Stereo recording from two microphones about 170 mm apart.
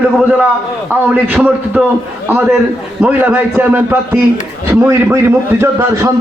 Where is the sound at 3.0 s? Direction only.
10° right (ahead or behind).